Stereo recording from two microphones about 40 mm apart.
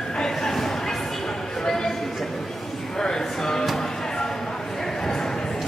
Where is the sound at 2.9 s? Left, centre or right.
Centre.